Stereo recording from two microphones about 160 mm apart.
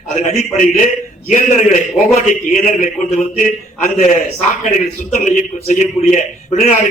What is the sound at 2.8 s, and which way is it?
A man's voice, 55° left (ahead or behind).